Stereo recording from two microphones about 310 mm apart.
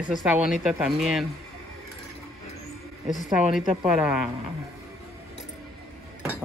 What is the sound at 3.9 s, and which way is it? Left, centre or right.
Speech, centre.